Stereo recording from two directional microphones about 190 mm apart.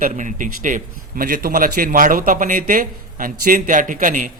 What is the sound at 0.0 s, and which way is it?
A man's voice, 40° right (ahead or behind).